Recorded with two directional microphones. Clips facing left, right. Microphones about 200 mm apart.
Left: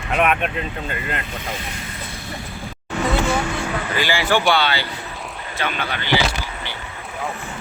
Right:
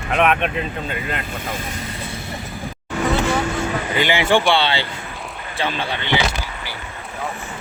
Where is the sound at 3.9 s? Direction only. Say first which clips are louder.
Right 3 dB; 20° right (ahead or behind).